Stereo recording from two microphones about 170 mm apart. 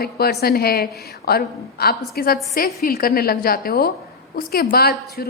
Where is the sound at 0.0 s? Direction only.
70° left (ahead or behind).